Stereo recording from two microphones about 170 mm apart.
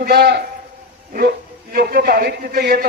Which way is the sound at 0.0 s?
65° right (ahead or behind).